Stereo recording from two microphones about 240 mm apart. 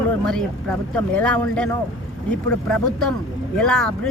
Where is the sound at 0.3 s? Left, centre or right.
Centre.